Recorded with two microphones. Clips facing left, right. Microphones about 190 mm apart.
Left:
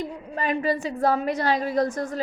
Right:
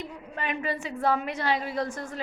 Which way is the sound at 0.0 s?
40° left (ahead or behind).